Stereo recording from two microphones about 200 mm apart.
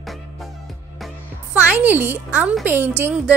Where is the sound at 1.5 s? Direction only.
5° right (ahead or behind).